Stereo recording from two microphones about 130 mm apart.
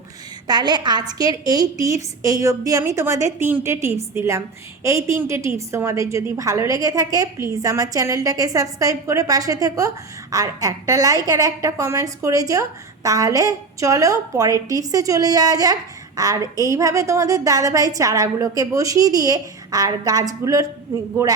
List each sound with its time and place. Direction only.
0.4 s a woman's voice: 35° right (ahead or behind)